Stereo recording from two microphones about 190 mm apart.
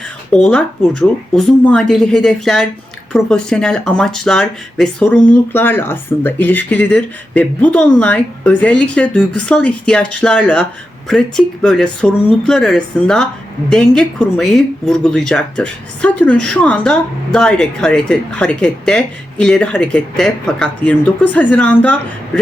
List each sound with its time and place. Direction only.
0.3 s speech: 5° left (ahead or behind)